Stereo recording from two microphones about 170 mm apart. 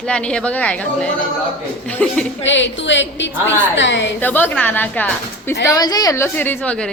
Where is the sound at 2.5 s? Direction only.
90° left.